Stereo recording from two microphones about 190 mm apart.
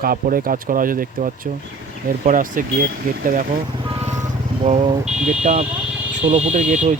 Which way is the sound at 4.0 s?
35° right (ahead or behind).